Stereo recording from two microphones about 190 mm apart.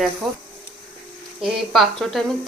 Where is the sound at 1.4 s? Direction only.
Centre (ahead or behind).